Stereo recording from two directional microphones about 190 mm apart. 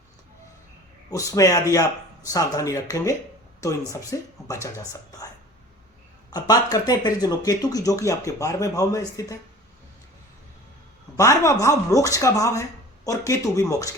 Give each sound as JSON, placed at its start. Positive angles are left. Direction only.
{"t": 1.1, "sound": "speech", "side_deg": 15}
{"t": 6.3, "sound": "speech", "side_deg": 20}
{"t": 11.2, "sound": "speech", "side_deg": 15}